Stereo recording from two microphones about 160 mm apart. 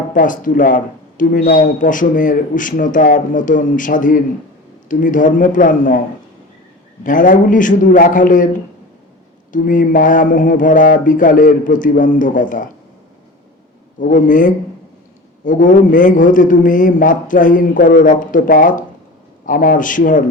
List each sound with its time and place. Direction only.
0.1 s speech: 55° left (ahead or behind)
7.0 s speech: 55° left (ahead or behind)
9.5 s speech: 55° left (ahead or behind)
14.0 s speech: 55° left (ahead or behind)